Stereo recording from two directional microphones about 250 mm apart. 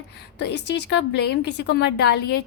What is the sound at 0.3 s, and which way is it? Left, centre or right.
A woman's voice, left.